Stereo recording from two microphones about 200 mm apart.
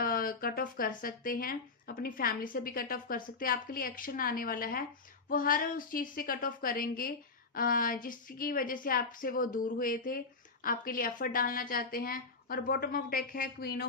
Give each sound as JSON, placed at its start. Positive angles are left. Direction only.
{"t": 0.0, "sound": "speech", "side_deg": 45}